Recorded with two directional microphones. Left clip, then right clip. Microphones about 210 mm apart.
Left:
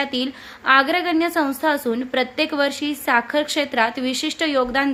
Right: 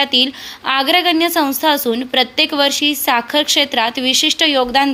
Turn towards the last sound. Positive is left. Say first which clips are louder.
# right 6 dB
turn(degrees=-5)  # may be behind; listen again after turning